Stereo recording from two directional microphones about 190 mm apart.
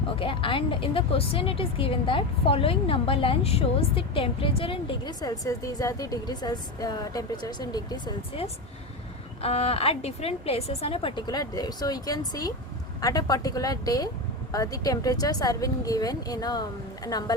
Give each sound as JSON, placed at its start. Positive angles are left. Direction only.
{"t": 0.2, "sound": "a woman's voice", "side_deg": 25}